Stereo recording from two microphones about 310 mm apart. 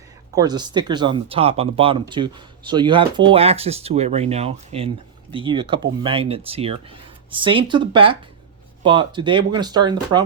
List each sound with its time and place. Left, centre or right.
0.3 s speech: centre